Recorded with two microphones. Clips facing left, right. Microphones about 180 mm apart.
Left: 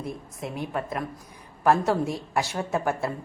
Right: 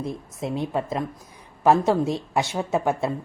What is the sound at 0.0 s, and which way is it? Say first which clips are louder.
A woman's voice: right 4 dB; 25° right (ahead or behind).